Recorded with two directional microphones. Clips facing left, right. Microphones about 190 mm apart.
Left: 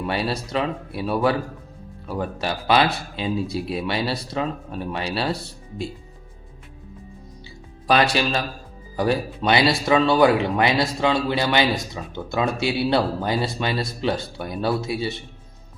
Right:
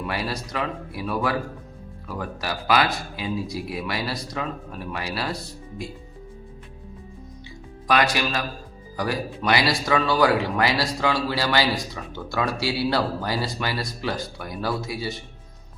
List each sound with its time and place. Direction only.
0.0 s speech: 30° left (ahead or behind)
7.9 s speech: 30° left (ahead or behind)